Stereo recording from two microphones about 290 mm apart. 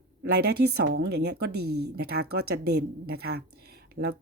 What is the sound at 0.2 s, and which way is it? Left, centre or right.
A woman's voice, right.